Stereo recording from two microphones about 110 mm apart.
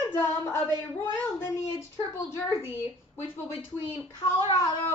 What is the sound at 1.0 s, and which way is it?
A woman's voice, 35° left (ahead or behind).